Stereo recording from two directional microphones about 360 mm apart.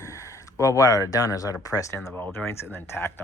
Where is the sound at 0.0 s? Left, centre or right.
Centre.